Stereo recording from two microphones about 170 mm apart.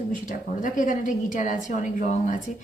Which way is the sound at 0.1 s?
50° left (ahead or behind).